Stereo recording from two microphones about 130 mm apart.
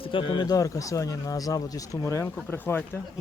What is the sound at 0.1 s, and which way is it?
Speech, 40° left (ahead or behind).